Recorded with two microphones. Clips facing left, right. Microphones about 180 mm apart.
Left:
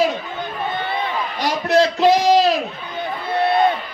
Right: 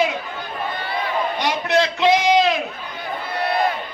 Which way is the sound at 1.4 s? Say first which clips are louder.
Left 5 dB; 40° left (ahead or behind).